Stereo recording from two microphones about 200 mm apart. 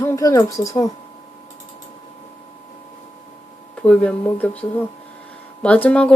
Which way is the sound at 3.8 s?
5° left (ahead or behind).